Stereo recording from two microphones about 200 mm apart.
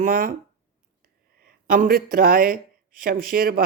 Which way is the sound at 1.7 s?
45° right (ahead or behind).